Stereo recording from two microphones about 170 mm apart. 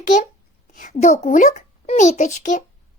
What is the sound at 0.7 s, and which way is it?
A child's voice, 50° left (ahead or behind).